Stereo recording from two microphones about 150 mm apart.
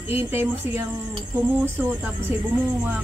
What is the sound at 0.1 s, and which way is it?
Speech, 15° right (ahead or behind).